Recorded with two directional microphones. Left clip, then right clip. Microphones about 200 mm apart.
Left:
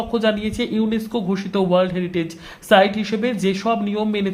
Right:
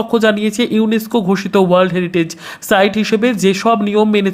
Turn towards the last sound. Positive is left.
turn(degrees=-35)  # may be behind; listen again after turning